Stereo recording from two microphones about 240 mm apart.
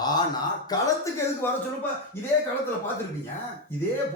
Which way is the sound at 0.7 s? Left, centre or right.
Centre.